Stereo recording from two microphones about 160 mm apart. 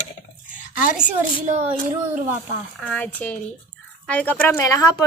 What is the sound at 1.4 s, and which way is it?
Speech, 50° right (ahead or behind).